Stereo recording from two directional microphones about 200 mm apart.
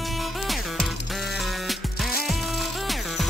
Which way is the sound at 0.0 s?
Centre (ahead or behind).